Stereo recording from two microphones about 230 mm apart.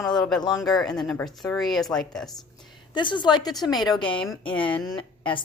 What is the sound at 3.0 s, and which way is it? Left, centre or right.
Speech, centre.